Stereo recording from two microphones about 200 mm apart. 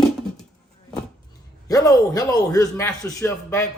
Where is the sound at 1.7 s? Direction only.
20° left (ahead or behind).